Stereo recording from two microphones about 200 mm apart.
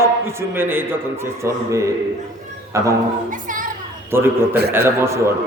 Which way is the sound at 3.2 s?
40° right (ahead or behind).